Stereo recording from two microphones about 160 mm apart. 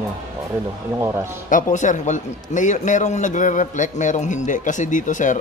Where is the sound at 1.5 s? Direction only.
50° left (ahead or behind).